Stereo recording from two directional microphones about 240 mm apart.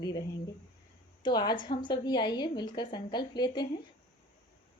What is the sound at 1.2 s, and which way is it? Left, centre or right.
Speech, centre.